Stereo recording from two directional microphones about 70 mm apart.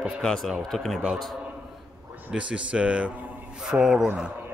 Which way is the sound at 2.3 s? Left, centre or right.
Centre.